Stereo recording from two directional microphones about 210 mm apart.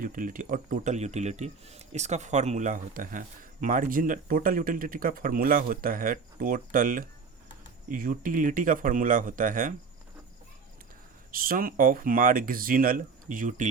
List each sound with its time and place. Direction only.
0.0 s speech: 40° right (ahead or behind)
11.3 s speech: 45° right (ahead or behind)